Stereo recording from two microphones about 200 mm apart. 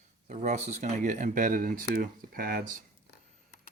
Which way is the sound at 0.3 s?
35° right (ahead or behind).